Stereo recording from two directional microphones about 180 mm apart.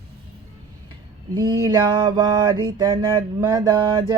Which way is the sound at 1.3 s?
20° right (ahead or behind).